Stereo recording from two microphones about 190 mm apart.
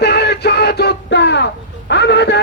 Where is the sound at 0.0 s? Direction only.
60° left (ahead or behind).